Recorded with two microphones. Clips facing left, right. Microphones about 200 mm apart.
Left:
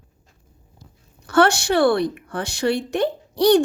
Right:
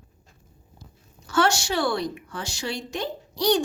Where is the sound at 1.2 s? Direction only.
60° left (ahead or behind).